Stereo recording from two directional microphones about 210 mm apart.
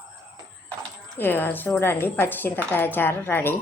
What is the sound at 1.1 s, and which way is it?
A woman's voice, 10° left (ahead or behind).